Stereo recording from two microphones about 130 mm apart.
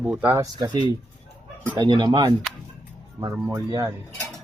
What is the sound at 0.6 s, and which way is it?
Speech, 35° right (ahead or behind).